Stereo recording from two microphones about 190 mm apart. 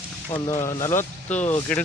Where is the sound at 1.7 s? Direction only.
5° left (ahead or behind).